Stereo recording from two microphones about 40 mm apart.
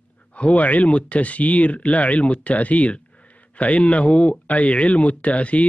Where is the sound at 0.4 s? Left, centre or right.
Left.